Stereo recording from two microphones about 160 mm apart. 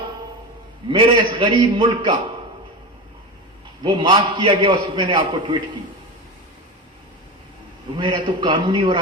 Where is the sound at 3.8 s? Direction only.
30° right (ahead or behind).